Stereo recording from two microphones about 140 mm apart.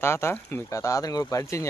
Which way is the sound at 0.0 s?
20° left (ahead or behind).